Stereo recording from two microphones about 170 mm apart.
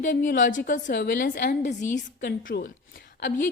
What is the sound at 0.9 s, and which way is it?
Speech, 60° left (ahead or behind).